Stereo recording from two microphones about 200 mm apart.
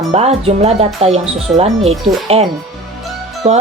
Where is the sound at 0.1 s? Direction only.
30° right (ahead or behind).